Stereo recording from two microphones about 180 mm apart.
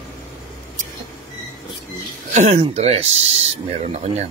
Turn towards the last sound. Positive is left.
turn(degrees=-35)  # may be behind; listen again after turning